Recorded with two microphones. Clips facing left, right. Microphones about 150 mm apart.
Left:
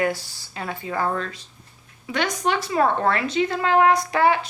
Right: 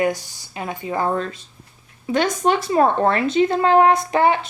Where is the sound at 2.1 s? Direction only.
40° right (ahead or behind).